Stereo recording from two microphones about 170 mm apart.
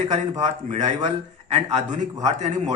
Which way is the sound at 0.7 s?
45° right (ahead or behind).